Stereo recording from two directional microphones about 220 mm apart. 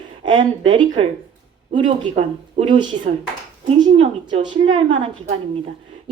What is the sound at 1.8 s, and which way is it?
Speech, 25° right (ahead or behind).